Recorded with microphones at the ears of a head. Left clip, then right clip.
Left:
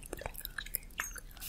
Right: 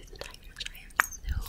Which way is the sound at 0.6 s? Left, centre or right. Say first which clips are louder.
Right 13 dB; right.